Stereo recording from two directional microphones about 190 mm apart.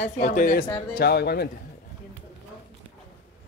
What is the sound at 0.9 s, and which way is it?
Speech, 60° left (ahead or behind).